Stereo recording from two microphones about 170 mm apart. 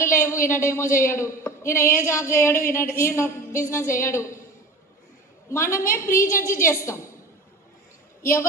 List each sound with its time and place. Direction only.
0.0 s speech: 15° left (ahead or behind)
5.5 s speech: 15° left (ahead or behind)
8.2 s speech: 15° left (ahead or behind)